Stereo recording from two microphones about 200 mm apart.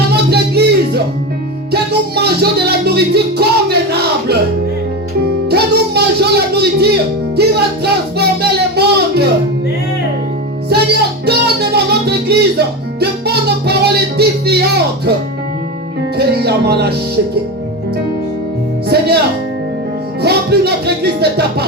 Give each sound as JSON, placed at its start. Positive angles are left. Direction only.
{"t": 0.3, "sound": "music", "side_deg": -55}
{"t": 5.5, "sound": "music", "side_deg": -55}
{"t": 8.2, "sound": "a sound", "side_deg": -55}
{"t": 10.7, "sound": "music", "side_deg": -55}
{"t": 16.1, "sound": "music", "side_deg": -55}
{"t": 18.9, "sound": "music", "side_deg": -55}
{"t": 20.2, "sound": "music", "side_deg": -55}